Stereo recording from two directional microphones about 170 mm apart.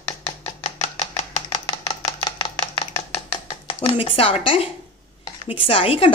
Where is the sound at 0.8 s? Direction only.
40° left (ahead or behind).